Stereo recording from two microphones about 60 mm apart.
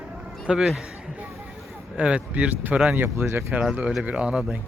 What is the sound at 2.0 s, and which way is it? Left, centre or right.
Speech, right.